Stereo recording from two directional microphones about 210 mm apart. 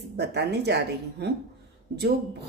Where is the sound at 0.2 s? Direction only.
55° right (ahead or behind).